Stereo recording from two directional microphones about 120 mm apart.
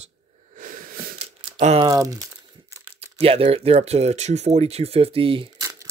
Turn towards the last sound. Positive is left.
turn(degrees=-30)  # may be behind; listen again after turning